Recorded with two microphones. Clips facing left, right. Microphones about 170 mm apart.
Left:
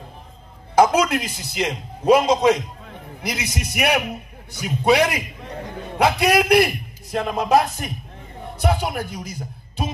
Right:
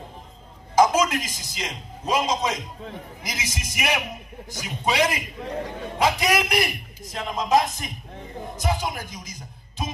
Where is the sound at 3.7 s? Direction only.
65° left (ahead or behind).